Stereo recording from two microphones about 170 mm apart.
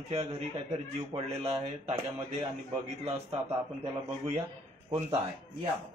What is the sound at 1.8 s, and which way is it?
Speech, 35° right (ahead or behind).